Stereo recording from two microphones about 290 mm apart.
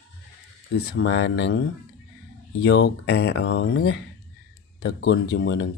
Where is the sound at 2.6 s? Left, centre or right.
Left.